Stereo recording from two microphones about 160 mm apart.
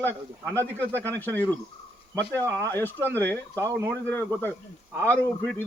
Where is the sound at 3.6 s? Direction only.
20° right (ahead or behind).